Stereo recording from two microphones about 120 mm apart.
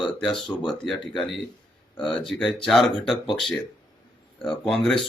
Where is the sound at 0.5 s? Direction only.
15° left (ahead or behind).